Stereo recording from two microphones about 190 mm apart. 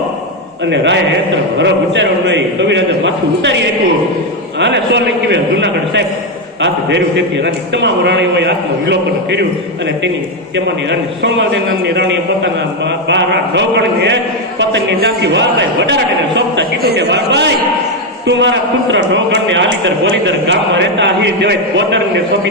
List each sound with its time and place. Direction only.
0.7 s a man's voice: 65° right (ahead or behind)
4.6 s a man's voice: 65° right (ahead or behind)
10.5 s a man's voice: 70° right (ahead or behind)